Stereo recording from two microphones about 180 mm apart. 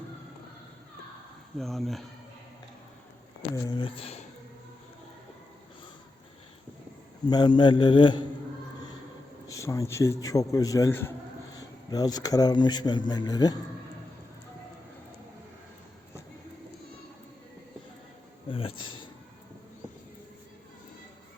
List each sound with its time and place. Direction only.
1.5 s speech: centre (ahead or behind)
3.5 s a man's voice: 25° left (ahead or behind)
7.3 s a man's voice: 25° left (ahead or behind)
9.5 s a man's voice: 15° left (ahead or behind)
18.4 s a sound: 30° left (ahead or behind)